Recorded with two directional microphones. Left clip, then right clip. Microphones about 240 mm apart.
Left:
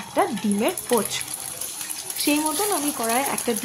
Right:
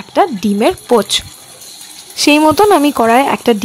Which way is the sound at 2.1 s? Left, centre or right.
Right.